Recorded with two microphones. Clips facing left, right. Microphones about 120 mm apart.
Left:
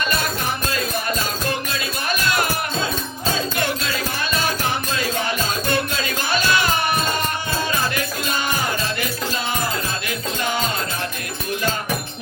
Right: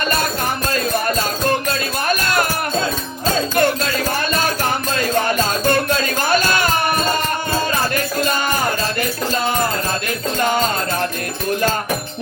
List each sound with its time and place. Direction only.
0.7 s music: 45° right (ahead or behind)